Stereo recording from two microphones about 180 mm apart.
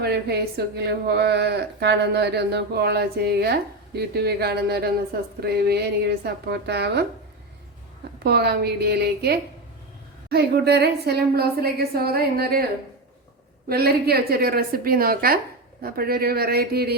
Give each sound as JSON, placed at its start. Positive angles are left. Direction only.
{"t": 0.0, "sound": "speech", "side_deg": -65}
{"t": 8.2, "sound": "speech", "side_deg": -65}
{"t": 13.7, "sound": "speech", "side_deg": -60}